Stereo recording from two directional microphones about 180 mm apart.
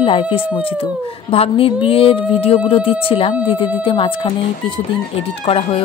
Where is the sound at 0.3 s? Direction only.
30° left (ahead or behind).